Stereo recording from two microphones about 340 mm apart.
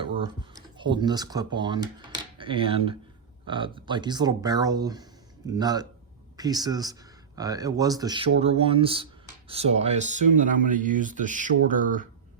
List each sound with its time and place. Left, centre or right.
0.8 s speech: centre